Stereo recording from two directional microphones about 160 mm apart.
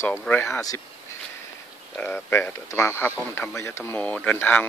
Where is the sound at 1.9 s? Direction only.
10° left (ahead or behind).